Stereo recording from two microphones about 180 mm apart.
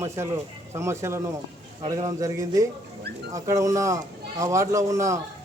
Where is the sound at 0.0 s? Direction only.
15° right (ahead or behind).